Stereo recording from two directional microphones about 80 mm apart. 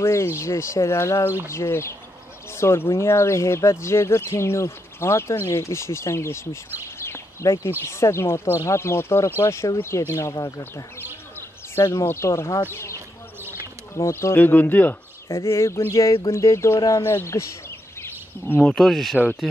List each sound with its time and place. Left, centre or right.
0.0 s speech: left
11.7 s speech: left
12.7 s basketball bounce: left
13.9 s speech: left
15.2 s speech: left
18.6 s speech: centre